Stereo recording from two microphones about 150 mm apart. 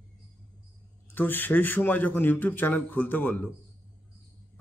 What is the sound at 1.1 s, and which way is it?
A man's voice, 15° left (ahead or behind).